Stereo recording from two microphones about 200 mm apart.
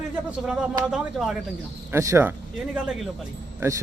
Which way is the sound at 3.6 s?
15° right (ahead or behind).